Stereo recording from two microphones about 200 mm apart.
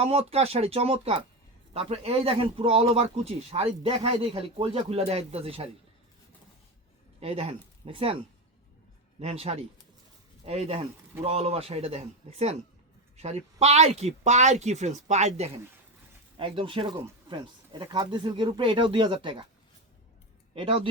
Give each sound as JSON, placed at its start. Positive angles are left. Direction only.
{"t": 0.0, "sound": "speech", "side_deg": -30}
{"t": 7.2, "sound": "speech", "side_deg": -30}
{"t": 9.2, "sound": "speech", "side_deg": -30}
{"t": 20.6, "sound": "speech", "side_deg": -25}